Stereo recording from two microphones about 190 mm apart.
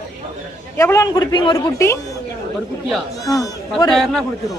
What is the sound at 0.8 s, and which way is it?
A woman's voice, 15° left (ahead or behind).